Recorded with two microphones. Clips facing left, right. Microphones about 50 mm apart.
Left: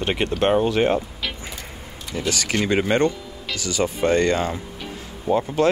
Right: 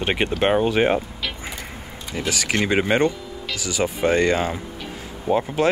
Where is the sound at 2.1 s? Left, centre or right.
Centre.